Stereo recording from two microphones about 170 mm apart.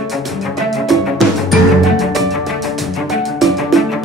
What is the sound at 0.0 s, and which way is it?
Music, centre (ahead or behind).